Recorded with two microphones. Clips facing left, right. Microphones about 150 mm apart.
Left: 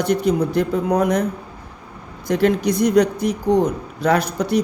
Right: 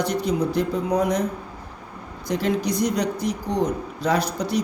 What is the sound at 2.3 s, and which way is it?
A man's voice, 60° left (ahead or behind).